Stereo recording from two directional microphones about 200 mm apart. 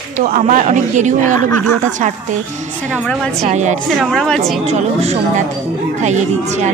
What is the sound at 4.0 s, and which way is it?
Speech, centre (ahead or behind).